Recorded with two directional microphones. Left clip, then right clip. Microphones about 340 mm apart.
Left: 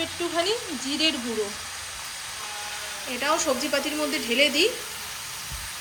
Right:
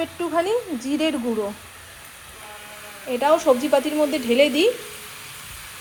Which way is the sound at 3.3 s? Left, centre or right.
Right.